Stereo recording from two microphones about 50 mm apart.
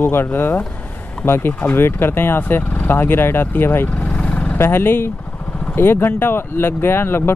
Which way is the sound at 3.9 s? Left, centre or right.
Left.